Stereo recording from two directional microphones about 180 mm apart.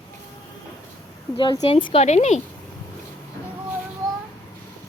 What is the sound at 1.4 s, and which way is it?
Speech, 25° left (ahead or behind).